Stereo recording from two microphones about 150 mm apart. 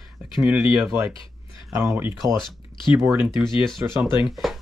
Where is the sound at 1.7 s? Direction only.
20° right (ahead or behind).